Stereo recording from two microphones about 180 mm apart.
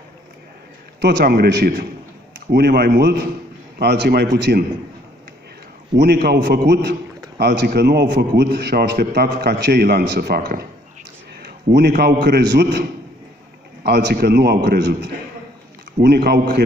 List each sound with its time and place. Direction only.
1.0 s a man's voice: 60° right (ahead or behind)
5.9 s a man's voice: 65° right (ahead or behind)
13.8 s a man's voice: 65° right (ahead or behind)